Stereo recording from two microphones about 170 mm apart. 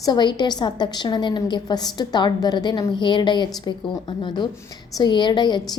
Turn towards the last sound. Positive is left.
turn(degrees=25)  # may be behind; listen again after turning